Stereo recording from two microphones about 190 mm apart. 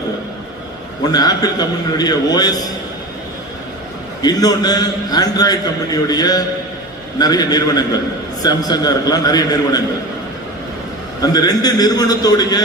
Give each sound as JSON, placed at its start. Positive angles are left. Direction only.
{"t": 1.1, "sound": "a man's voice", "side_deg": 20}
{"t": 4.2, "sound": "a man's voice", "side_deg": 20}
{"t": 11.2, "sound": "a man's voice", "side_deg": 20}